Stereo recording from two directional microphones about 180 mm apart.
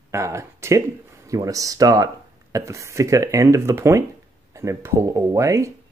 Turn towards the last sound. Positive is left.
turn(degrees=-15)  # may be behind; listen again after turning